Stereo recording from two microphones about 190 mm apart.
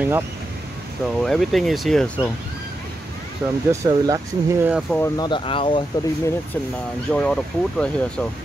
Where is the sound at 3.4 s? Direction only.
5° right (ahead or behind).